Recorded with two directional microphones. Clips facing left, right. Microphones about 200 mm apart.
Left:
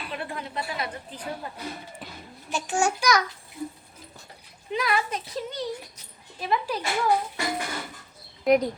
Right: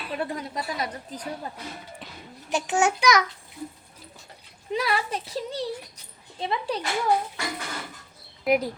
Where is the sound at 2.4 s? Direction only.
20° right (ahead or behind).